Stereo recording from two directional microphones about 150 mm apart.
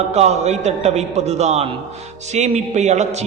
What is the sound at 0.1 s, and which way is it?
A man's voice, 50° right (ahead or behind).